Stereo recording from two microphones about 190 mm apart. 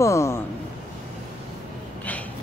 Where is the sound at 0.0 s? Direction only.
15° left (ahead or behind).